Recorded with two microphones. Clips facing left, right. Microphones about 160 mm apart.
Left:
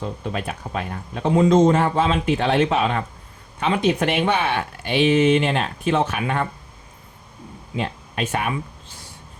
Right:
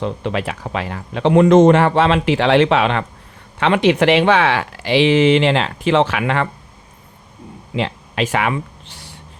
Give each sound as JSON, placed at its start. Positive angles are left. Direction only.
{"t": 0.0, "sound": "speech", "side_deg": -80}
{"t": 7.8, "sound": "speech", "side_deg": -90}